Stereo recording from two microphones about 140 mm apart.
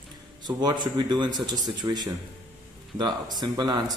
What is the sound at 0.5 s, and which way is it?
A man's voice, 30° right (ahead or behind).